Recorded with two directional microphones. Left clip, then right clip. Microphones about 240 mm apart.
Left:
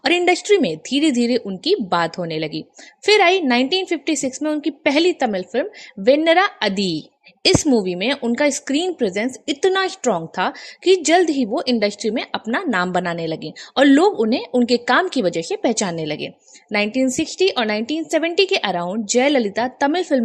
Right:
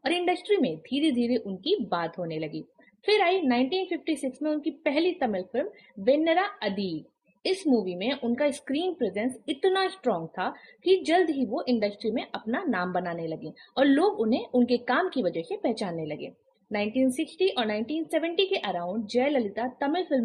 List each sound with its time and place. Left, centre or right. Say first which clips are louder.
0.0 s a woman's voice: left 10 dB; left